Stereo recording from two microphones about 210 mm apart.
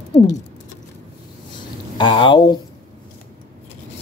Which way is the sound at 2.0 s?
25° left (ahead or behind).